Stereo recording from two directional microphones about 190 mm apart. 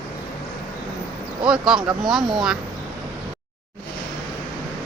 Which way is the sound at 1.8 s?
25° right (ahead or behind).